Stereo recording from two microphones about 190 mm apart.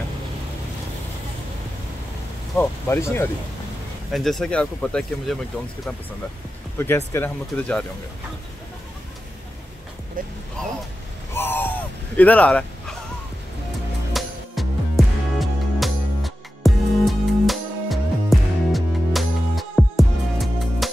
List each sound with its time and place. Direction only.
2.5 s speech: 10° left (ahead or behind)
4.1 s speech: centre (ahead or behind)
7.1 s speech: 10° left (ahead or behind)
10.2 s speech: 45° right (ahead or behind)
10.6 s speech: 5° left (ahead or behind)
14.1 s music: centre (ahead or behind)